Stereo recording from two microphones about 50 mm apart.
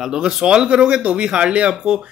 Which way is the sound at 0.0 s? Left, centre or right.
Centre.